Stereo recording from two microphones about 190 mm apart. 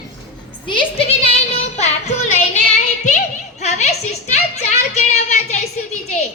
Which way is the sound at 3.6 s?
35° left (ahead or behind).